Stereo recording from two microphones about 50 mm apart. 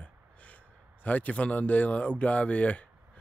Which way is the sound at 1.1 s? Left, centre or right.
Left.